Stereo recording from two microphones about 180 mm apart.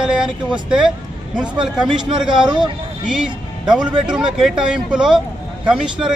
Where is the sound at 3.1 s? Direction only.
5° right (ahead or behind).